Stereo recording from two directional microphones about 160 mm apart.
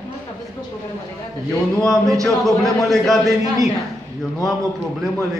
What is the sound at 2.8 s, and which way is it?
Speech, centre (ahead or behind).